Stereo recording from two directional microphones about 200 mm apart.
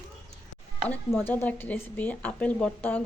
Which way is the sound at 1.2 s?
10° left (ahead or behind).